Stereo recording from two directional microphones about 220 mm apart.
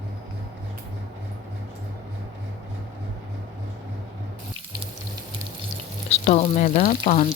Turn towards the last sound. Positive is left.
turn(degrees=35)  # may be behind; listen again after turning